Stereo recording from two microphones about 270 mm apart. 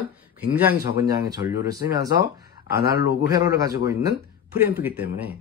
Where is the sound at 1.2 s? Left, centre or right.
Centre.